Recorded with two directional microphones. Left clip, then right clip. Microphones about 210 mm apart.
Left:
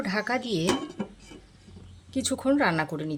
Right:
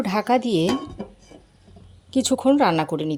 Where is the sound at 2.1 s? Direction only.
20° right (ahead or behind).